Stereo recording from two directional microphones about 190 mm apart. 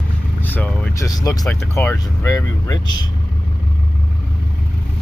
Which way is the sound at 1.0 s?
20° left (ahead or behind).